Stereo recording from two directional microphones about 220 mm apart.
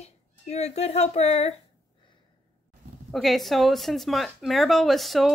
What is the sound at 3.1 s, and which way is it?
A woman's voice, centre (ahead or behind).